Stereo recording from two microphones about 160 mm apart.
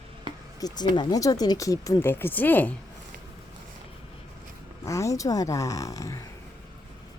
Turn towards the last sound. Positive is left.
turn(degrees=20)  # may be behind; listen again after turning